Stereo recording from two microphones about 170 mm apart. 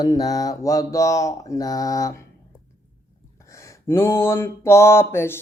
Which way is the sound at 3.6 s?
15° left (ahead or behind).